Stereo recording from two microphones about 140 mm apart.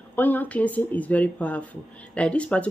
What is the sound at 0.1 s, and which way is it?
Speech, 10° left (ahead or behind).